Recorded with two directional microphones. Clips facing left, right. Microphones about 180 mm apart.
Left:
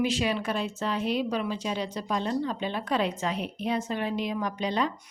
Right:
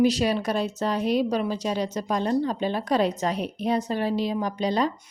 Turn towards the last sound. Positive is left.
turn(degrees=-35)  # may be behind; listen again after turning